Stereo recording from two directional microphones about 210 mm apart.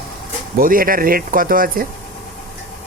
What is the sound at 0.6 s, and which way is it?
Speech, 40° right (ahead or behind).